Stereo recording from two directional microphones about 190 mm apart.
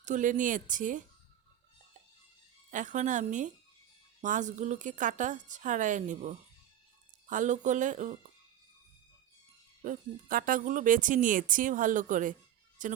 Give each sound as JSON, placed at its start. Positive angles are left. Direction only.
{"t": 0.0, "sound": "speech", "side_deg": -40}
{"t": 2.6, "sound": "a woman's voice", "side_deg": -40}
{"t": 9.8, "sound": "speech", "side_deg": -45}